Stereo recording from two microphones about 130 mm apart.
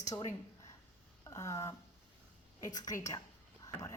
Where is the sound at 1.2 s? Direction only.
25° left (ahead or behind).